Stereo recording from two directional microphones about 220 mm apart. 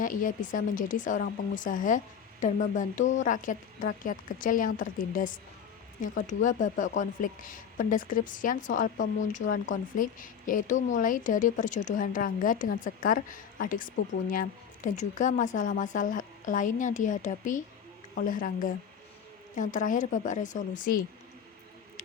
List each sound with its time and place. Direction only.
0.0 s speech: 35° left (ahead or behind)